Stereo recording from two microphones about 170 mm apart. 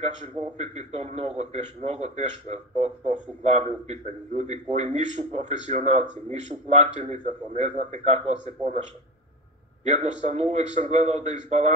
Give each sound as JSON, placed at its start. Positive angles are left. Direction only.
{"t": 0.0, "sound": "a man's voice", "side_deg": -40}
{"t": 10.2, "sound": "a man's voice", "side_deg": -40}